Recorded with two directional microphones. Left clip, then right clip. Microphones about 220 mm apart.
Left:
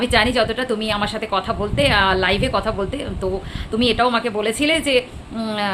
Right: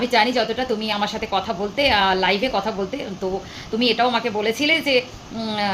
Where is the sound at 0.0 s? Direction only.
10° left (ahead or behind).